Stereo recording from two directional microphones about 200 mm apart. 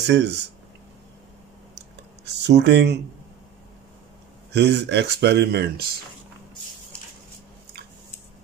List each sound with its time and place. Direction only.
0.0 s speech: 60° right (ahead or behind)
2.2 s speech: 60° right (ahead or behind)
4.6 s speech: 60° right (ahead or behind)